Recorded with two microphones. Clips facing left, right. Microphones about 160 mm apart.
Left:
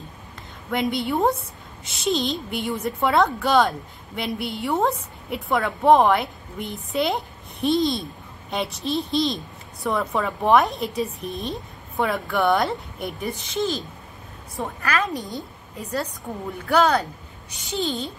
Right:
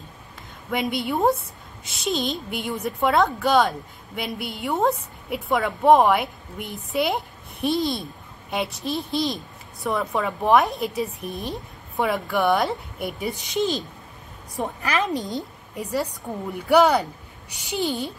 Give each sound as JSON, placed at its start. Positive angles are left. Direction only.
{"t": 0.7, "sound": "a woman's voice", "side_deg": -5}
{"t": 13.2, "sound": "a woman's voice", "side_deg": -15}